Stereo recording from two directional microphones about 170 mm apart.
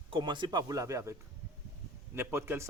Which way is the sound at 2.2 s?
15° right (ahead or behind).